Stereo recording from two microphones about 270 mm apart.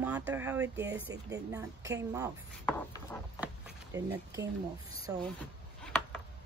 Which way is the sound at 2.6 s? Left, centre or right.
Centre.